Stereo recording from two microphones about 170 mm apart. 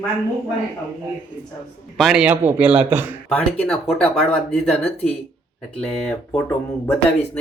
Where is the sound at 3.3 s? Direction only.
10° left (ahead or behind).